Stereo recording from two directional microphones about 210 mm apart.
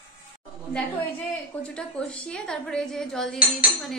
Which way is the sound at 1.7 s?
5° left (ahead or behind).